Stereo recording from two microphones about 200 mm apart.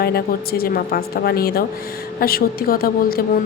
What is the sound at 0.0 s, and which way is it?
Speech, 50° left (ahead or behind).